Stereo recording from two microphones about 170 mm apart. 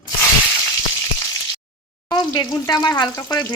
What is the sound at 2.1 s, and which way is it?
Speech, 25° left (ahead or behind).